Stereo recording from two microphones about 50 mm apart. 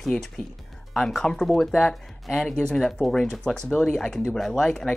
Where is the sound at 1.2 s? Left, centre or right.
Centre.